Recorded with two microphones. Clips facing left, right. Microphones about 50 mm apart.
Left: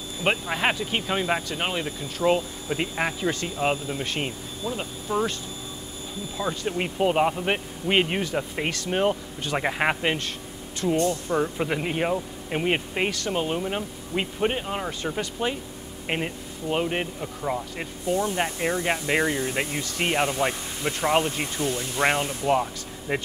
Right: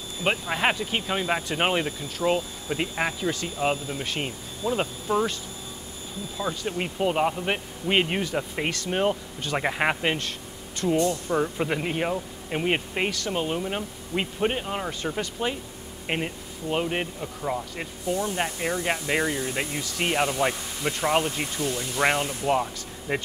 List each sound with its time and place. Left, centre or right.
0.2 s speech: centre
0.6 s speech: centre
1.5 s speech: right
2.0 s speech: centre
3.3 s speech: centre
4.6 s speech: right
6.3 s speech: centre
18.0 s speech: left
18.4 s speech: centre
21.5 s speech: left
22.5 s speech: centre